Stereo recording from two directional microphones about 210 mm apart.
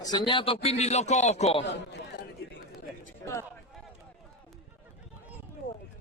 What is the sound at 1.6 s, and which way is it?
Speech, 60° left (ahead or behind).